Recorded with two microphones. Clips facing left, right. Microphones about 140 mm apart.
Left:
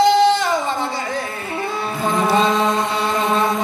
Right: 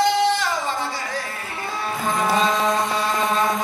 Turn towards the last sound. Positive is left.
turn(degrees=25)  # may be behind; listen again after turning